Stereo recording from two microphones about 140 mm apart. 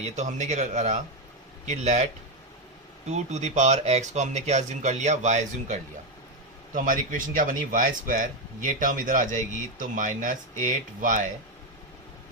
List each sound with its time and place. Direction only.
0.0 s speech: 55° right (ahead or behind)
3.1 s speech: 55° right (ahead or behind)
6.7 s speech: 80° right